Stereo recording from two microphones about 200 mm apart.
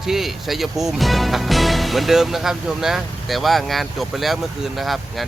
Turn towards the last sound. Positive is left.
turn(degrees=0)  # may be behind; listen again after turning